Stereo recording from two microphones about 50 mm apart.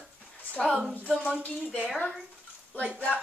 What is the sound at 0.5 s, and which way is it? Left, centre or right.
Speech, left.